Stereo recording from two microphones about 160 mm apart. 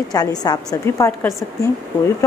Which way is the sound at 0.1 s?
25° left (ahead or behind).